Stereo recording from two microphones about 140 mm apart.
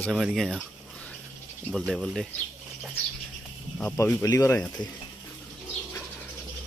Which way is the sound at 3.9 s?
25° left (ahead or behind).